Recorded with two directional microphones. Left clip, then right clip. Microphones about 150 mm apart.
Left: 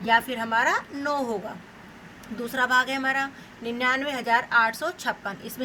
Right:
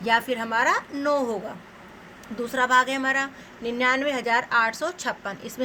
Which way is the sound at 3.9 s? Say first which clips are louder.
Left 1 dB; 65° right (ahead or behind).